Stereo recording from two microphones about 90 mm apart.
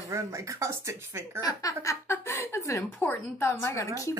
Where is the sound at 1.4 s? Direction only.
45° left (ahead or behind).